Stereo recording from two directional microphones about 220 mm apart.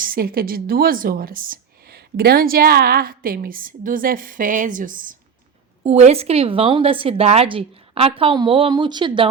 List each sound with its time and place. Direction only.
0.0 s speech: 40° right (ahead or behind); by 9.2 s 20° right (ahead or behind)